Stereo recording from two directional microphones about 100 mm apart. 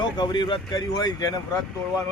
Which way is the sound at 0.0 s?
45° left (ahead or behind).